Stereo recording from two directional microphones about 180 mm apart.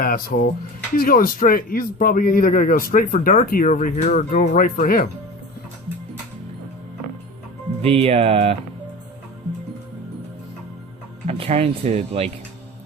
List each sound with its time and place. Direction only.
0.0 s a man's voice: 50° left (ahead or behind)
7.8 s speech: 35° right (ahead or behind)
11.3 s speech: 35° right (ahead or behind)